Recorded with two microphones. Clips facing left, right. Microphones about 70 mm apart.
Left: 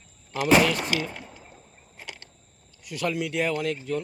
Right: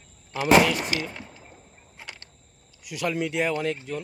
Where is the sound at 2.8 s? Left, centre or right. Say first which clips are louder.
Right 1 dB; centre.